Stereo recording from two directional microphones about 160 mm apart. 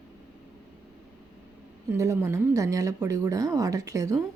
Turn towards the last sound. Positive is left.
turn(degrees=-20)  # may be behind; listen again after turning